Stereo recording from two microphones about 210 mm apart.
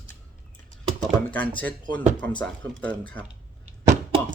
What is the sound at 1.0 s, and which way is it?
Speech, 5° left (ahead or behind).